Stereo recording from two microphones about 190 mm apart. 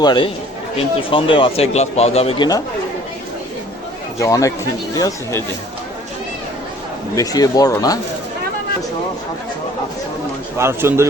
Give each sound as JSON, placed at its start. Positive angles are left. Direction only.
{"t": 0.0, "sound": "speech", "side_deg": 25}
{"t": 4.2, "sound": "speech", "side_deg": 15}
{"t": 7.2, "sound": "speech", "side_deg": 20}
{"t": 10.6, "sound": "speech", "side_deg": -15}